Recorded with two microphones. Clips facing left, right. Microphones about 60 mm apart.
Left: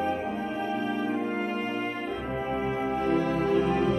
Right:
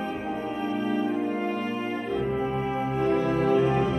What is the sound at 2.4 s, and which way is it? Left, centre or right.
Music, centre.